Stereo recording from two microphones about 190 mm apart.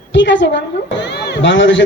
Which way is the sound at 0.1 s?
70° left (ahead or behind).